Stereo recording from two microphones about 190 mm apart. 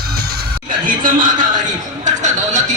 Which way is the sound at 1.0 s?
45° right (ahead or behind).